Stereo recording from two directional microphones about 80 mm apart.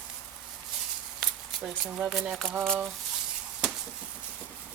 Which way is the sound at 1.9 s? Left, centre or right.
Centre.